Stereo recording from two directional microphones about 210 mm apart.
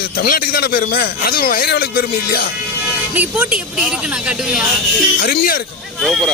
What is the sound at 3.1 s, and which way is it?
A woman's voice, 5° right (ahead or behind).